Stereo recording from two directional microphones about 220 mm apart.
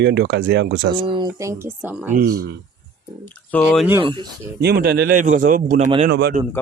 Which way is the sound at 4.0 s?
20° right (ahead or behind).